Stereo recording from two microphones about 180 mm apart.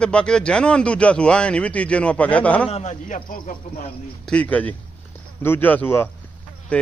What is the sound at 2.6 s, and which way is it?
Speech, 35° left (ahead or behind).